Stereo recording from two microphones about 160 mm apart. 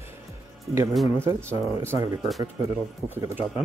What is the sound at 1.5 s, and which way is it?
Speech, 15° right (ahead or behind).